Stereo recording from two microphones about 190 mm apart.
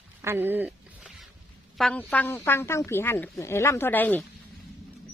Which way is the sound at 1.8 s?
5° left (ahead or behind).